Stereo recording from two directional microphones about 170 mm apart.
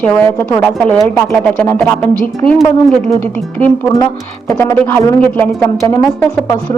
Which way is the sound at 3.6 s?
20° left (ahead or behind).